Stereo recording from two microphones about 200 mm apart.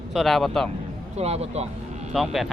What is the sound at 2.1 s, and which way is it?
Speech, centre (ahead or behind).